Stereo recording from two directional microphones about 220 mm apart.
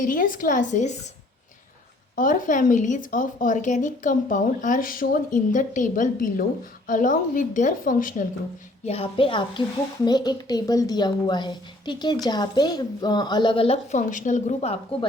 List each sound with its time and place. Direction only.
0.0 s a woman's voice: 40° left (ahead or behind)
2.1 s a woman's voice: 40° left (ahead or behind)
8.9 s a woman's voice: 25° left (ahead or behind)